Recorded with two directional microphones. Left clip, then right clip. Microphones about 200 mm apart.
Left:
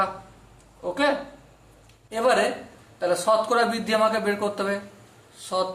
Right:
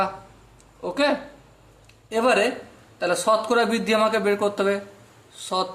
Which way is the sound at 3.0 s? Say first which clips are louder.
Even; 45° right (ahead or behind).